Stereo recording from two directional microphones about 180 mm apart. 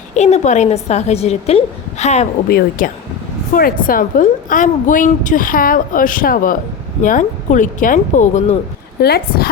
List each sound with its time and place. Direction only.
0.1 s a woman's voice: 40° left (ahead or behind)
2.5 s a woman's voice: 55° left (ahead or behind)
9.0 s a woman's voice: 60° left (ahead or behind)